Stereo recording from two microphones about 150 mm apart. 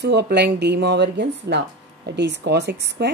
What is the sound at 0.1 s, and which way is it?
Speech, 90° right.